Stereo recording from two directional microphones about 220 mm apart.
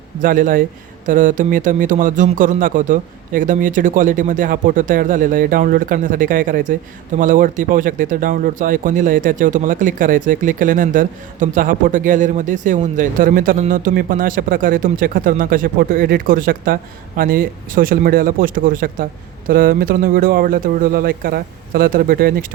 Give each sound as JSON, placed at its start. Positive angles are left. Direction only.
{"t": 0.2, "sound": "speech", "side_deg": -40}